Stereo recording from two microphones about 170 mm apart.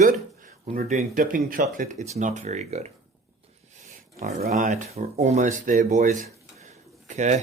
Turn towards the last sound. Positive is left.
turn(degrees=-45)  # may be behind; listen again after turning